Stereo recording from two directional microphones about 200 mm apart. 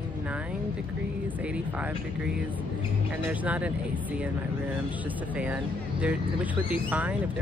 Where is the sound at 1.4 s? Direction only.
5° right (ahead or behind).